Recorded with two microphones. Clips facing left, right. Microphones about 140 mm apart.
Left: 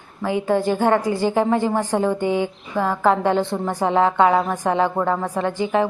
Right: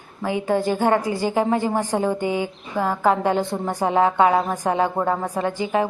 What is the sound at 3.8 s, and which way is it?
Speech, 25° right (ahead or behind).